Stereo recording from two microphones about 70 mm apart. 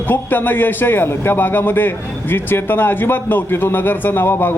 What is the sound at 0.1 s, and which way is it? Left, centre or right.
A man's voice, left.